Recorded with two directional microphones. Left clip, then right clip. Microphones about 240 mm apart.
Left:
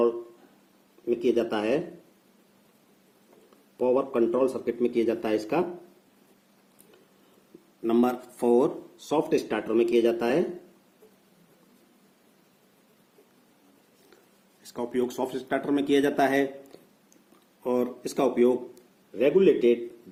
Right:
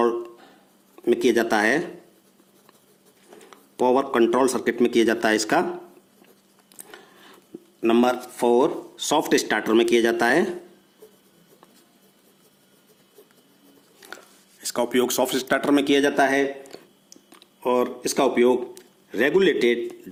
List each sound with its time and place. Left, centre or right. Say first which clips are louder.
1.3 s speech: right 4 dB; right
3.8 s speech: right 5 dB; right
7.8 s speech: right 5 dB; right
9.0 s speech: right 5 dB; right
14.6 s speech: right 7 dB; right
19.2 s speech: right 1 dB; right